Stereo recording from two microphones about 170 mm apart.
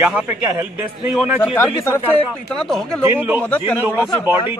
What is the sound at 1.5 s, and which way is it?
Speech, 15° left (ahead or behind).